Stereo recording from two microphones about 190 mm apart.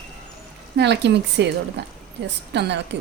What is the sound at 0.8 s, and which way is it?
A woman's voice, 65° right (ahead or behind).